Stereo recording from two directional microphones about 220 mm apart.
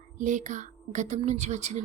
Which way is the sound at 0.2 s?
35° right (ahead or behind).